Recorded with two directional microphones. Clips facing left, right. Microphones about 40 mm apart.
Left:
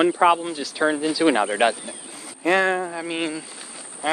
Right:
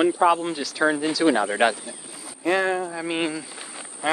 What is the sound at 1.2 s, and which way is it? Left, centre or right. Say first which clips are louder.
Speech: left 1 dB; left.